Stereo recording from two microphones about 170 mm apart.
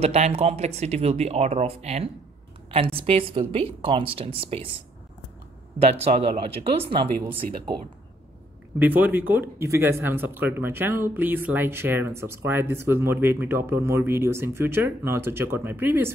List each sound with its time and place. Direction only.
0.0 s speech: 40° right (ahead or behind)
6.5 s speech: 35° right (ahead or behind)
8.7 s speech: 10° right (ahead or behind)